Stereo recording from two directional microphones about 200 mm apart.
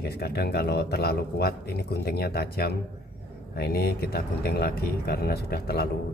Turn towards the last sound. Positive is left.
turn(degrees=50)  # may be behind; listen again after turning